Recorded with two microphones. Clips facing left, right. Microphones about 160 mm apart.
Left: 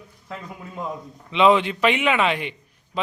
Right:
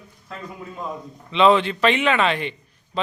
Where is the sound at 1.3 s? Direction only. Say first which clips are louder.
Right 1 dB; 15° left (ahead or behind).